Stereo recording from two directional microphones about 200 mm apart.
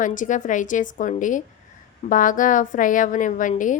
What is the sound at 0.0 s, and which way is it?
A woman's voice, 40° left (ahead or behind).